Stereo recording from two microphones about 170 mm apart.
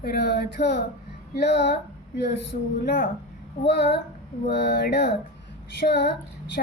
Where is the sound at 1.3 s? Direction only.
90° left.